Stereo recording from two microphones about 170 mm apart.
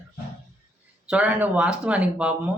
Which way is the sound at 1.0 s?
5° right (ahead or behind).